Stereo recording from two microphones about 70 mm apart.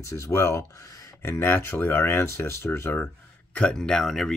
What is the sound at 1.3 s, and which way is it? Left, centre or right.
Speech, left.